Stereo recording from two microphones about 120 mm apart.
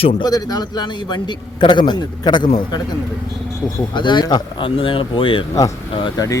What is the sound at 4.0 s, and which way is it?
A man's voice, 40° left (ahead or behind).